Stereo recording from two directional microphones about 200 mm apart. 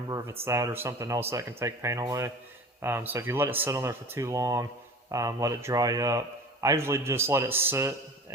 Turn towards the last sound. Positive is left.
turn(degrees=-10)  # may be behind; listen again after turning